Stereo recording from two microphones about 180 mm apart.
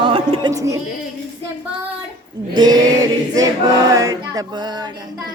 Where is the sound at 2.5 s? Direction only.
20° right (ahead or behind).